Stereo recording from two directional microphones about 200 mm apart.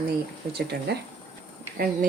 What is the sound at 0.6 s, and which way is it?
Speech, 55° right (ahead or behind).